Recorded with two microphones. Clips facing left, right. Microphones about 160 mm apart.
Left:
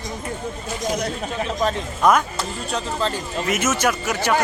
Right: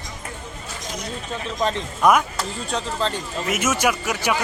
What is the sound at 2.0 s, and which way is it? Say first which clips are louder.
Speech: even; 10° right (ahead or behind).